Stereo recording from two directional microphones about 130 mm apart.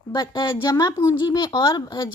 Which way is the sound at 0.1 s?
35° left (ahead or behind).